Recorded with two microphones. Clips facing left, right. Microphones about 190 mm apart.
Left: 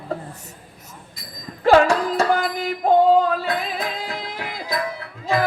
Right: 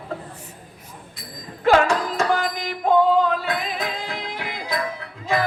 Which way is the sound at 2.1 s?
35° left (ahead or behind).